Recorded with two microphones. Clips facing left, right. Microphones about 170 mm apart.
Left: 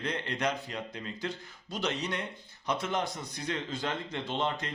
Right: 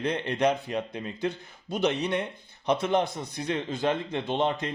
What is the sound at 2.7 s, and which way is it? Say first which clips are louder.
A man's voice: right 7 dB; 20° right (ahead or behind).